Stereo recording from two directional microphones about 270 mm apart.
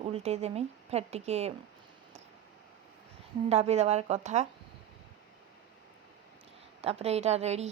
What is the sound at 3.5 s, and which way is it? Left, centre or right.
A woman's voice, right.